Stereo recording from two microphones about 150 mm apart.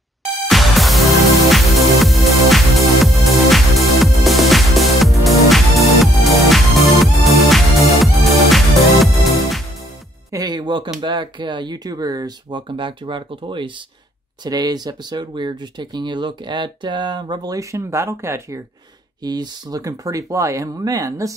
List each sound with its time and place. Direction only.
0.5 s music: centre (ahead or behind)
10.3 s music: 25° right (ahead or behind)
11.0 s speech: 30° right (ahead or behind)